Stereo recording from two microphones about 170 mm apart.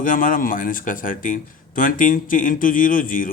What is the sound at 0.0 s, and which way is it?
A man's voice, 55° left (ahead or behind).